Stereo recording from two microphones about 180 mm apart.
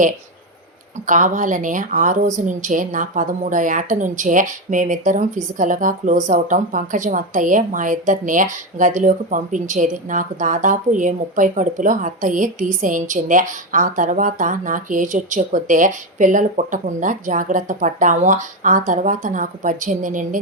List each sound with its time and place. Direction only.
1.0 s a woman's voice: 45° right (ahead or behind)